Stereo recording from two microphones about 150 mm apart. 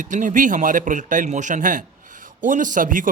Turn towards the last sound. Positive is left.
turn(degrees=-65)  # may be behind; listen again after turning